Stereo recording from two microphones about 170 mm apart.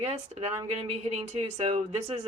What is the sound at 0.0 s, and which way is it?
Speech, 40° right (ahead or behind).